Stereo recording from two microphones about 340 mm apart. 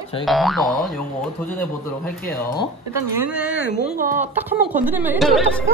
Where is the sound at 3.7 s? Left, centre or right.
Left.